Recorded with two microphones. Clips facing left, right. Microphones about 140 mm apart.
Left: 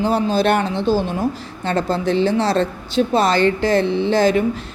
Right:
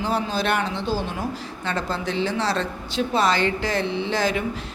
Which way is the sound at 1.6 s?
50° left (ahead or behind).